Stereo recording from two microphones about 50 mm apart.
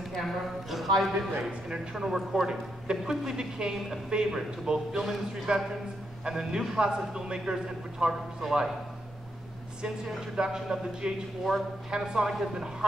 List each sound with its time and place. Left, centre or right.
0.2 s speech: centre
1.7 s a man's voice: centre
8.1 s a man's voice: centre
9.8 s a man's voice: centre
11.5 s speech: centre
11.9 s a man's voice: centre